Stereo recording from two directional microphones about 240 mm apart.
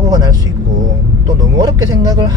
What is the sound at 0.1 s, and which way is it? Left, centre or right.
Vehicle, centre.